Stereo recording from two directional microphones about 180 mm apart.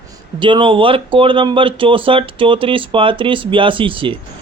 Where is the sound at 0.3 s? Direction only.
25° right (ahead or behind).